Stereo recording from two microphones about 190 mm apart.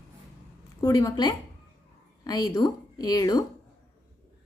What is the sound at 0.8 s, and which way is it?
A woman's voice, 20° left (ahead or behind).